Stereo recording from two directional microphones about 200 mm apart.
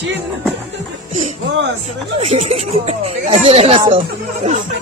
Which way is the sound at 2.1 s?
35° right (ahead or behind).